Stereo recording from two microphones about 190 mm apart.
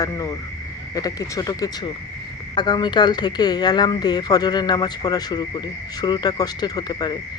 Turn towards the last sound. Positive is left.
turn(degrees=25)  # may be behind; listen again after turning